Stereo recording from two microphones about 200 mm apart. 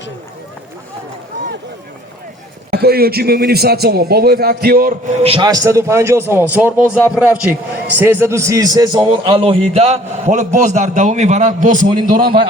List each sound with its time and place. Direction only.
2.6 s a man's voice: 50° right (ahead or behind)
5.2 s a man's voice: 25° right (ahead or behind); by 12.3 s 45° right (ahead or behind)